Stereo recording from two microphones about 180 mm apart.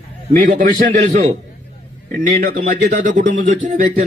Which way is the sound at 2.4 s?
55° right (ahead or behind).